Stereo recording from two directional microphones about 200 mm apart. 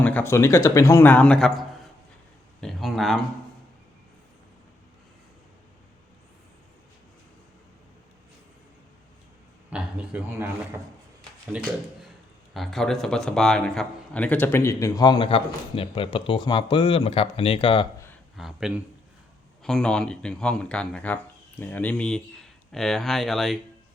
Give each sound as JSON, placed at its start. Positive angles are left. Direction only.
{"t": 0.0, "sound": "a man's voice", "side_deg": 10}
{"t": 9.6, "sound": "a man's voice", "side_deg": -5}
{"t": 11.5, "sound": "a man's voice", "side_deg": -5}
{"t": 18.3, "sound": "speech", "side_deg": 0}